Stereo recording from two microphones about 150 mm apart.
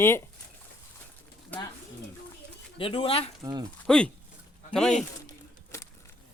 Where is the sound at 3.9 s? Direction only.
5° left (ahead or behind).